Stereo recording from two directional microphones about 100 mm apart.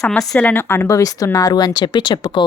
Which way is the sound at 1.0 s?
35° left (ahead or behind).